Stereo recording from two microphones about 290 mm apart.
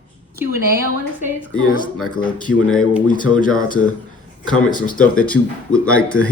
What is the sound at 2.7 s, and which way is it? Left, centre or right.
Speech, centre.